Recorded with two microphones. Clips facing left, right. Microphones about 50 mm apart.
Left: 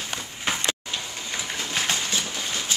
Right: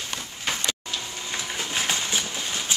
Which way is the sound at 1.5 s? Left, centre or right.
Centre.